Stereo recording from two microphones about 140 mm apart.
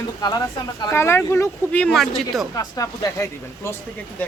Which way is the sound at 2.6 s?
25° left (ahead or behind).